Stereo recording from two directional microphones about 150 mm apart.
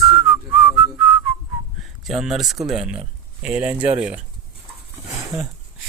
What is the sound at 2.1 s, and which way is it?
Speech, centre (ahead or behind).